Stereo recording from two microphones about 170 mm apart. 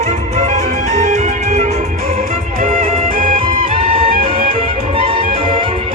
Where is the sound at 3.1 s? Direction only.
55° right (ahead or behind).